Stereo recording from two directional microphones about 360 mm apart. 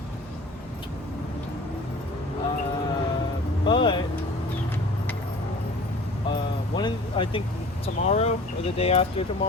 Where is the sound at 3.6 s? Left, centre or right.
Centre.